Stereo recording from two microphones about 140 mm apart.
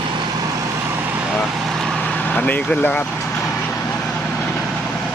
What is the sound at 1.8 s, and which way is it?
Vehicle, 10° left (ahead or behind).